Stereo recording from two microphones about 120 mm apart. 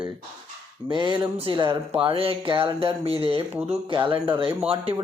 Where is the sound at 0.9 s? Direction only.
40° right (ahead or behind).